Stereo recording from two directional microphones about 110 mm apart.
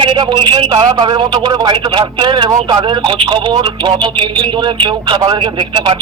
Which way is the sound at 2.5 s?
30° right (ahead or behind).